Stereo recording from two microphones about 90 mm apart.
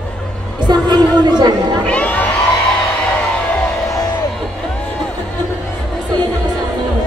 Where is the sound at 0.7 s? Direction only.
50° right (ahead or behind).